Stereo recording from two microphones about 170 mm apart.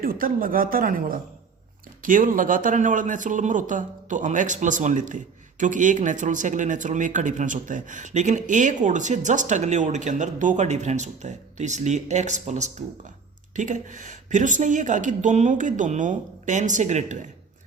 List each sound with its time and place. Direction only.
0.0 s a man's voice: 55° right (ahead or behind)